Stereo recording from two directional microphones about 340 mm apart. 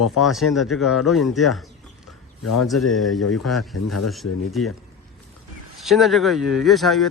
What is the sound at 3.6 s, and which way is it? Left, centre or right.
Speech, left.